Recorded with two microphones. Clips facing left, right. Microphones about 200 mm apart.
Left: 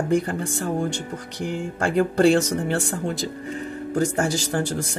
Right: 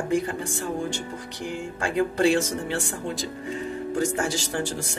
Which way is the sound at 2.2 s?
55° left (ahead or behind).